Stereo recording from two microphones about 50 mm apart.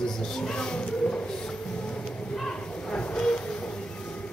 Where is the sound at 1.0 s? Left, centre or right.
Left.